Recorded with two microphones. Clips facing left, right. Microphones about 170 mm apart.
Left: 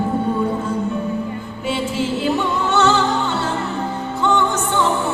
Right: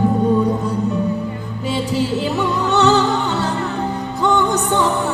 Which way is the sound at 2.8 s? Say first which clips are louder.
Right 2 dB; 15° right (ahead or behind).